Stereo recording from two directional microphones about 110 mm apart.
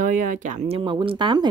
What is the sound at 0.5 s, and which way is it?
Speech, 60° right (ahead or behind).